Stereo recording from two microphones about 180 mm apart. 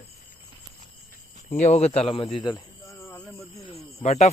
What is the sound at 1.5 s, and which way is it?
Speech, 40° left (ahead or behind).